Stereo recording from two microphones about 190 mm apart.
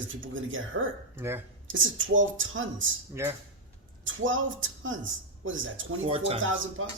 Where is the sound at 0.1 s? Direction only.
90° right.